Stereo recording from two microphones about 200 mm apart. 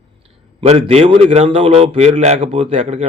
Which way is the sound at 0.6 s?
30° right (ahead or behind).